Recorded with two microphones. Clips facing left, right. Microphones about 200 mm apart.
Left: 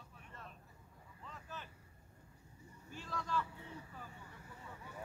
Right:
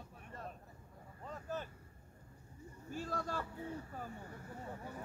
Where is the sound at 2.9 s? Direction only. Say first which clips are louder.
Right 2 dB; 45° right (ahead or behind).